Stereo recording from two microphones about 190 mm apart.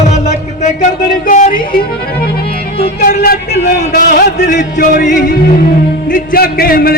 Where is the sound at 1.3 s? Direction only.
45° left (ahead or behind).